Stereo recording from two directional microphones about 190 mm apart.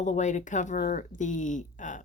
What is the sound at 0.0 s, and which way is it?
Speech, 40° left (ahead or behind).